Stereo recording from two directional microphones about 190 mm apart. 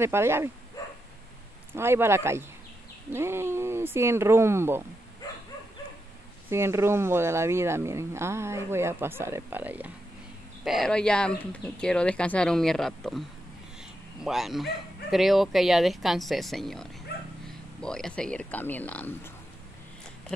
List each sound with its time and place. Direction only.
0.0 s speech: 15° right (ahead or behind)
0.8 s dog: 20° left (ahead or behind)
1.7 s speech: 10° right (ahead or behind)
6.5 s speech: 15° right (ahead or behind); by 13.2 s centre (ahead or behind)
14.2 s speech: centre (ahead or behind)